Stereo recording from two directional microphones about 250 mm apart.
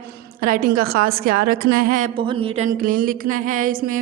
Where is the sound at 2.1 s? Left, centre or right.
Centre.